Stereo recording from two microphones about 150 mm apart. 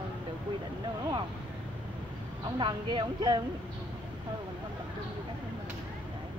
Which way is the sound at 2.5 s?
30° right (ahead or behind).